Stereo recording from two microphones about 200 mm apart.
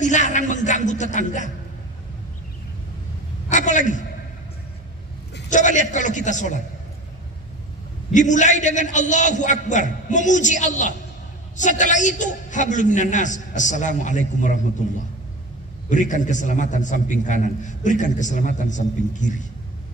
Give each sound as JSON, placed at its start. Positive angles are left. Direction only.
{"t": 0.0, "sound": "a sound", "side_deg": 40}
{"t": 0.5, "sound": "a man's voice", "side_deg": 40}
{"t": 3.4, "sound": "a sound", "side_deg": 40}
{"t": 5.5, "sound": "a man's voice", "side_deg": 40}
{"t": 8.1, "sound": "a man's voice", "side_deg": 40}
{"t": 15.9, "sound": "a man's voice", "side_deg": 40}